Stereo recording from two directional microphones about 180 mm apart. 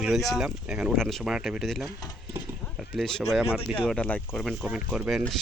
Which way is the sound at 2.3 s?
Centre (ahead or behind).